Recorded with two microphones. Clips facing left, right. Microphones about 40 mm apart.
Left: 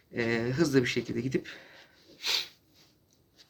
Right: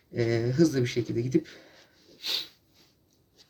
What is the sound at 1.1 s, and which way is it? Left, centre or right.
Speech, left.